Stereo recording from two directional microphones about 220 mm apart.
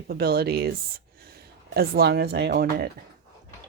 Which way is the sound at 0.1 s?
45° right (ahead or behind).